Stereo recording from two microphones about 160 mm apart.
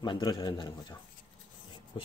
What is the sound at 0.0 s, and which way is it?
Speech, 30° left (ahead or behind).